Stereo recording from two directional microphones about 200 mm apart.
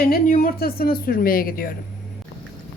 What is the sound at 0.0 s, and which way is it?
A woman's voice, 45° left (ahead or behind).